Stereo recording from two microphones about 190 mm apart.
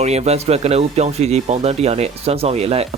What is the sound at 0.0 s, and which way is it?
Speech, 35° right (ahead or behind).